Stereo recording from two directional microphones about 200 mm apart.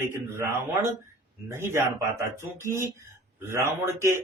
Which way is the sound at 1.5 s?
15° right (ahead or behind).